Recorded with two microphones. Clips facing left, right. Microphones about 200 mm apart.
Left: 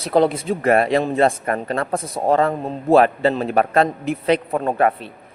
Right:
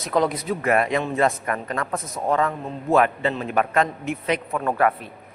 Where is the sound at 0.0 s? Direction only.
30° left (ahead or behind).